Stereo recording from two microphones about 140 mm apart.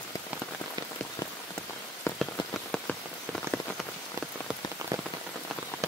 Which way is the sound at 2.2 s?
5° left (ahead or behind).